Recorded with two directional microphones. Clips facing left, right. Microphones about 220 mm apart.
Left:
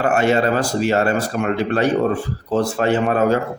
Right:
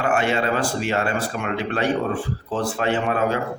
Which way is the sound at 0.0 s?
40° left (ahead or behind).